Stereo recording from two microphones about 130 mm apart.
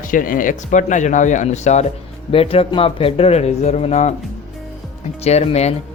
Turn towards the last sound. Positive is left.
turn(degrees=55)  # may be behind; listen again after turning